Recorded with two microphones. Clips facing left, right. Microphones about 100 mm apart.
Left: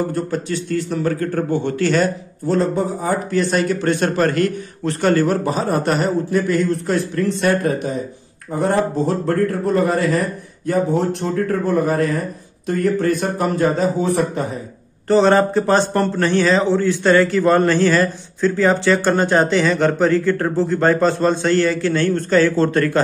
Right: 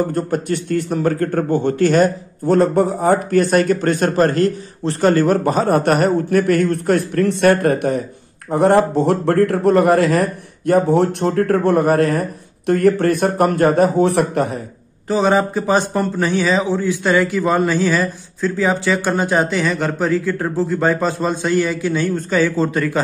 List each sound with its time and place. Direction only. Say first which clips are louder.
0.1 s a man's voice: right 2 dB; 50° right (ahead or behind); by 14.6 s 65° right (ahead or behind)
15.0 s a man's voice: left 2 dB; 5° right (ahead or behind)